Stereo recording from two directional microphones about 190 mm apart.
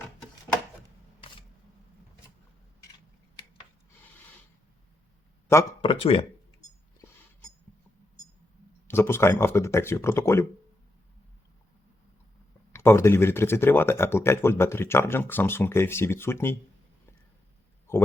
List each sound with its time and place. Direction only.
5.8 s speech: 30° left (ahead or behind)
8.9 s speech: 10° left (ahead or behind)
12.7 s speech: 15° left (ahead or behind)